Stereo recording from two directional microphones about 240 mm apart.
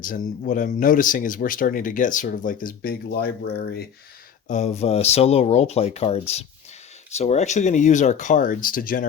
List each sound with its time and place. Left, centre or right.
0.0 s speech: left
4.4 s speech: left